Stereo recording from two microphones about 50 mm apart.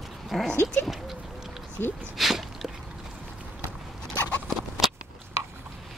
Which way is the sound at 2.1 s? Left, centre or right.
Centre.